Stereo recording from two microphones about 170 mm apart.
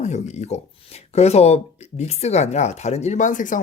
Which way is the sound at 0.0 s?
40° left (ahead or behind).